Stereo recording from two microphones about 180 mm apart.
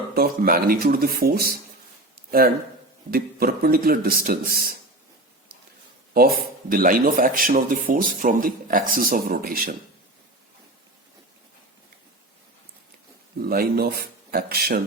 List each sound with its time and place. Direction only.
0.1 s a man's voice: 55° right (ahead or behind)
6.1 s speech: 55° right (ahead or behind)
13.4 s a man's voice: 55° right (ahead or behind)